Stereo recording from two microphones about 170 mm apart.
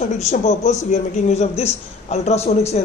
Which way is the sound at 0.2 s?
40° left (ahead or behind).